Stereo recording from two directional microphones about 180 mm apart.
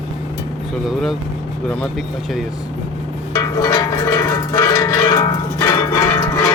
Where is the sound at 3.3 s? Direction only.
20° left (ahead or behind).